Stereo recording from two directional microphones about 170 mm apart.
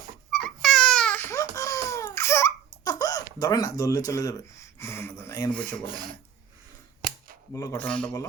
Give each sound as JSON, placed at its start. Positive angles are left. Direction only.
{"t": 0.3, "sound": "a sound", "side_deg": 0}
{"t": 2.8, "sound": "speech", "side_deg": 20}
{"t": 7.5, "sound": "speech", "side_deg": 15}
{"t": 7.9, "sound": "speech", "side_deg": 5}